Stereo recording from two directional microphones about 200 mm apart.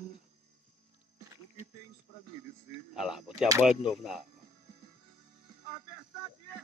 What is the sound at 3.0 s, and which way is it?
A man's voice, centre (ahead or behind).